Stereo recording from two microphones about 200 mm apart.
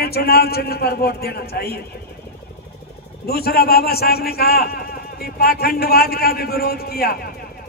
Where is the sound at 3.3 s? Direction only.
50° left (ahead or behind).